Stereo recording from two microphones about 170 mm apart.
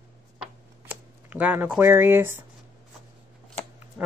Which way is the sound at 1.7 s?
10° right (ahead or behind).